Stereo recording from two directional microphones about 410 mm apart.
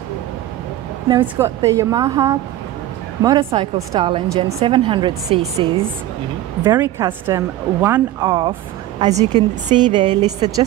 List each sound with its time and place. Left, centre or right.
1.0 s a woman's voice: centre